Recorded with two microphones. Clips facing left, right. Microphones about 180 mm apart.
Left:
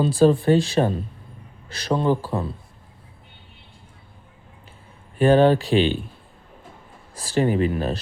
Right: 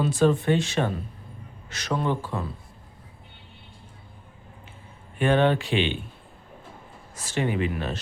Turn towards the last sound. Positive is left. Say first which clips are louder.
# left 6 dB
turn(degrees=35)  # may be behind; listen again after turning